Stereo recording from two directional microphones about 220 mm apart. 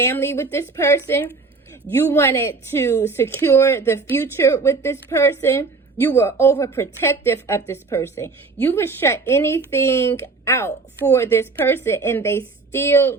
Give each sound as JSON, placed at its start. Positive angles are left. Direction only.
{"t": 0.0, "sound": "speech", "side_deg": 10}